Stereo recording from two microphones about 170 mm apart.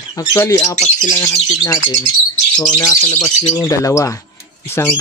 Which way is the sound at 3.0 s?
10° left (ahead or behind).